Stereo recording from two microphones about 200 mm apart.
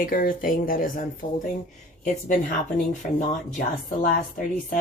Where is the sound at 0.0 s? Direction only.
45° left (ahead or behind).